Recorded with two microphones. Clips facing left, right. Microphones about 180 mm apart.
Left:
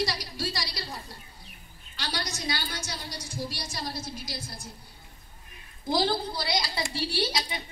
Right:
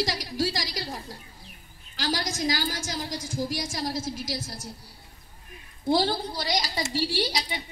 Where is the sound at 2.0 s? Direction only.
90° right.